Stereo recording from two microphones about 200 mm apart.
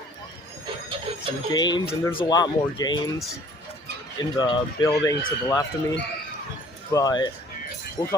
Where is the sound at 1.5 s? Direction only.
20° left (ahead or behind).